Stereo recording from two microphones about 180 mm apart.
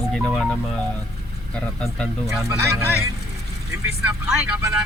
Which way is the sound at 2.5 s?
15° right (ahead or behind).